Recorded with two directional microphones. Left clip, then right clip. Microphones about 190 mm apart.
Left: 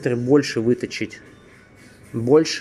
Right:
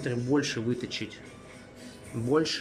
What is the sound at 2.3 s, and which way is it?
Speech, 20° left (ahead or behind).